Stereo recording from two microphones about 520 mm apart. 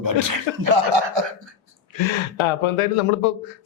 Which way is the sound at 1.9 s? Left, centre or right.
Left.